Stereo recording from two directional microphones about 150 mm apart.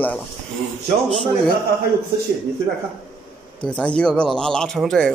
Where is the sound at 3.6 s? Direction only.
5° left (ahead or behind).